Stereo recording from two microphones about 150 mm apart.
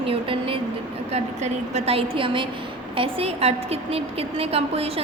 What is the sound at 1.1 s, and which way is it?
A woman's voice, 45° right (ahead or behind).